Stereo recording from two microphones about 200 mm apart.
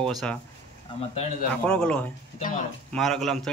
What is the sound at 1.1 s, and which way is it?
Speech, 35° left (ahead or behind).